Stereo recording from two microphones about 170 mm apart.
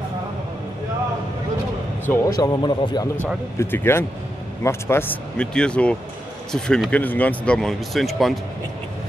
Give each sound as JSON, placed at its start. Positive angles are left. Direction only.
{"t": 2.0, "sound": "speech", "side_deg": 20}
{"t": 3.5, "sound": "speech", "side_deg": 15}